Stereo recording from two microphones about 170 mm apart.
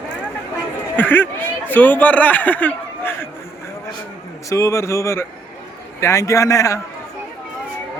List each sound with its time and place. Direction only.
0.9 s speech: 10° left (ahead or behind)
4.4 s a man's voice: 20° left (ahead or behind)